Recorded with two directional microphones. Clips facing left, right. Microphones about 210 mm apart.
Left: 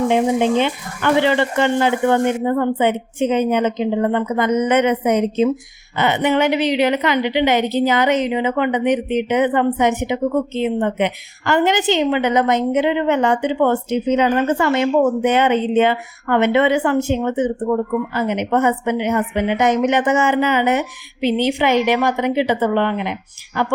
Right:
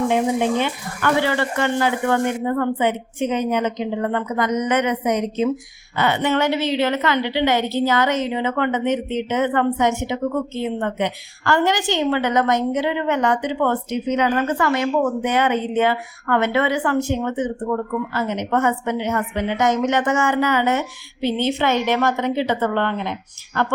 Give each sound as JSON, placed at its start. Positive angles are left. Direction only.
{"t": 0.1, "sound": "a woman's voice", "side_deg": 25}